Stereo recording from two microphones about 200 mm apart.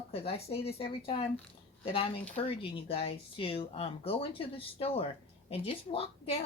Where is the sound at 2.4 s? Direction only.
30° left (ahead or behind).